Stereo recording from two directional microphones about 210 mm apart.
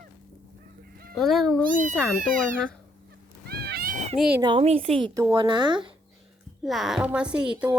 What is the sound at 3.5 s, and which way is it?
Cat, 50° right (ahead or behind).